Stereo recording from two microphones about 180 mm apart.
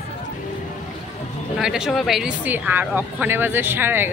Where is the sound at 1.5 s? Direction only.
5° right (ahead or behind).